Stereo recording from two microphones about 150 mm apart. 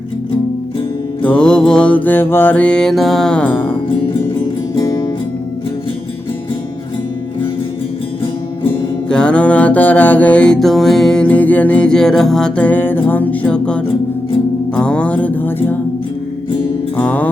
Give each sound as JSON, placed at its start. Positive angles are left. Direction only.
{"t": 1.2, "sound": "music", "side_deg": 5}
{"t": 4.7, "sound": "music", "side_deg": 25}
{"t": 9.0, "sound": "music", "side_deg": 5}
{"t": 17.0, "sound": "music", "side_deg": 10}